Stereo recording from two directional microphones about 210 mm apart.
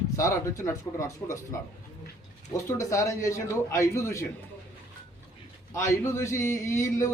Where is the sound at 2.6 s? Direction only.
15° left (ahead or behind).